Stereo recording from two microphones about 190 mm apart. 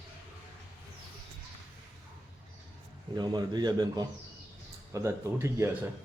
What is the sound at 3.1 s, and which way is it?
Speech, 20° right (ahead or behind).